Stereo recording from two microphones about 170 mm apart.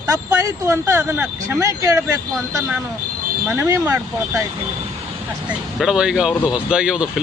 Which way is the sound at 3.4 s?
15° right (ahead or behind).